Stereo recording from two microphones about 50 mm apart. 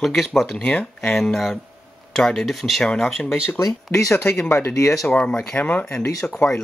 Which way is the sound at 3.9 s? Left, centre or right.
Left.